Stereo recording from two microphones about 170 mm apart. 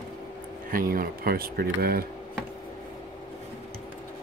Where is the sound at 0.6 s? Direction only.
55° right (ahead or behind).